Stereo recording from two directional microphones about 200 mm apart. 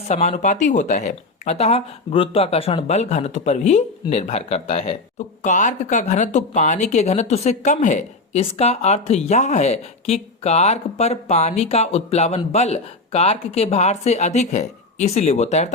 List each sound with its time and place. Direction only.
0.1 s speech: 35° left (ahead or behind)